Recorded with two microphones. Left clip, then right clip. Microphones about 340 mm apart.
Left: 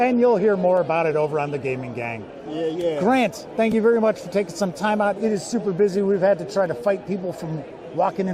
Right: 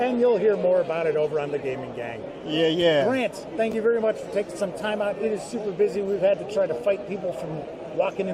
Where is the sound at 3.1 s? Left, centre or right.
Left.